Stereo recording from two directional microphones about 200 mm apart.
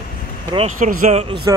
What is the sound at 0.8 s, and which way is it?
Speech, 40° right (ahead or behind).